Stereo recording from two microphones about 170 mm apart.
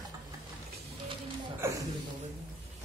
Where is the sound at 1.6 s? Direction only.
15° right (ahead or behind).